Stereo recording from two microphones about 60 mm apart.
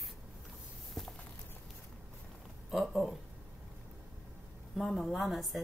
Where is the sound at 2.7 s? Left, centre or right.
Centre.